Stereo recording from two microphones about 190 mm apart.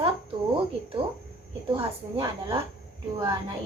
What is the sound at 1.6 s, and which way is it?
Speech, 30° right (ahead or behind).